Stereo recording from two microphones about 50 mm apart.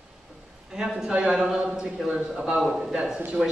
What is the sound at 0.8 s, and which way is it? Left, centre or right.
Speech, centre.